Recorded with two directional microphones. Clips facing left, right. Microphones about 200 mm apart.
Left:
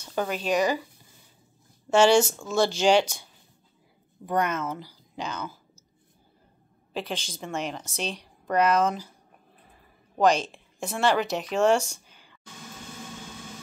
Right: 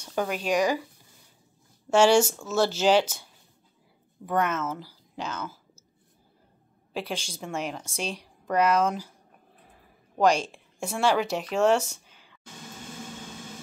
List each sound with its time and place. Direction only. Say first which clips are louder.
0.0 s speech: even; 5° right (ahead or behind)
1.9 s a woman's voice: even; 10° right (ahead or behind)
4.3 s speech: even; centre (ahead or behind)
6.9 s a woman's voice: even; 10° right (ahead or behind)
10.1 s speech: left 1 dB; 10° right (ahead or behind)